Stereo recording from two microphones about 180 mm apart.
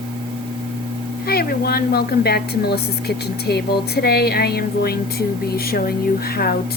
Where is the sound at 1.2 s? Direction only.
60° left (ahead or behind).